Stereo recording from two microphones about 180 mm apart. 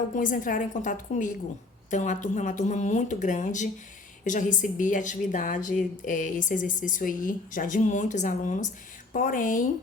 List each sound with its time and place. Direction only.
0.2 s a woman's voice: 45° left (ahead or behind)